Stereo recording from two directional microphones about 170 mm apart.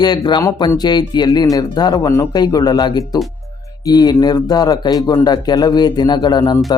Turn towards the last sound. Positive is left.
turn(degrees=25)  # may be behind; listen again after turning